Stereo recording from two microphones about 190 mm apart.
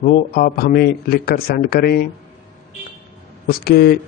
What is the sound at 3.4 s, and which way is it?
Speech, 55° left (ahead or behind).